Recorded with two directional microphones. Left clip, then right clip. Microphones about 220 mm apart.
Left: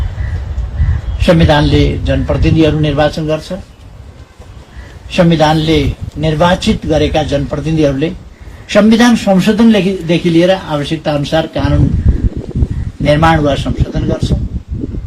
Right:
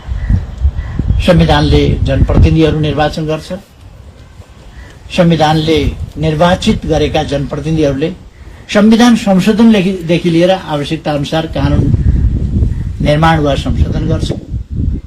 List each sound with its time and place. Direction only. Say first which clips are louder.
1.2 s a man's voice: even; 45° right (ahead or behind)
5.1 s a man's voice: even; 45° right (ahead or behind)
13.0 s a man's voice: left 1 dB; 45° right (ahead or behind)